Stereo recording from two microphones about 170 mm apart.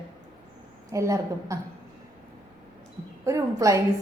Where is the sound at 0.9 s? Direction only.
15° right (ahead or behind).